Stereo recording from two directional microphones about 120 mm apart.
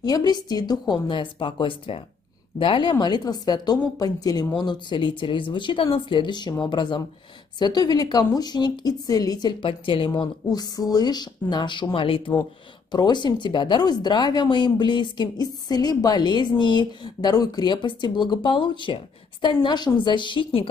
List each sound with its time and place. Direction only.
0.0 s speech: 35° left (ahead or behind)